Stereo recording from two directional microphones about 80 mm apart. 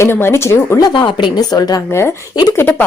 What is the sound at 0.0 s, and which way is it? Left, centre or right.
Speech, left.